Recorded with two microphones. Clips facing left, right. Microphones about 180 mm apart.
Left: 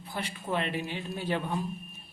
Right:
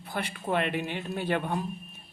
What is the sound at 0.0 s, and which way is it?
A man's voice, 60° right (ahead or behind).